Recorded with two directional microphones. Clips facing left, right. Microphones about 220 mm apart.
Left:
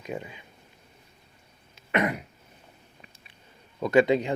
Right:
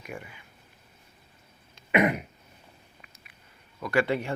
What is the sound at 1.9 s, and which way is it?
Throat clearing, 15° right (ahead or behind).